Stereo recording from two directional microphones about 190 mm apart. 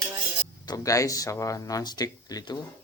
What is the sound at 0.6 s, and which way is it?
Speech, 20° left (ahead or behind).